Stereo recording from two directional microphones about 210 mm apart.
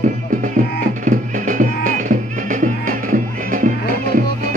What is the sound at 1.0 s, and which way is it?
Music, 40° right (ahead or behind).